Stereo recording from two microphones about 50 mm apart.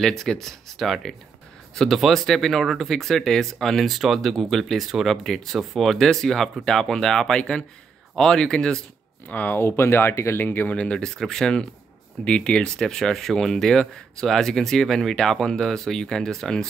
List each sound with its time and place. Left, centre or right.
0.0 s speech: centre
2.6 s speech: centre
3.8 s speech: centre
4.2 s speech: centre
9.3 s speech: left
9.6 s speech: left
10.4 s speech: left
10.7 s speech: left
11.1 s speech: centre